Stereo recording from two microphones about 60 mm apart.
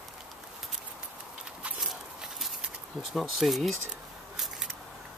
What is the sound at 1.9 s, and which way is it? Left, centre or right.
Horse, centre.